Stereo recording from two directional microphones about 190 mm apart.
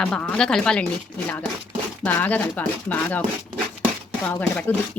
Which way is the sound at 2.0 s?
10° left (ahead or behind).